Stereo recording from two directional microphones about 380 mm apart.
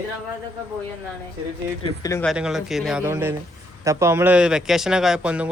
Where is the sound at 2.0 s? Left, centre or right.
Centre.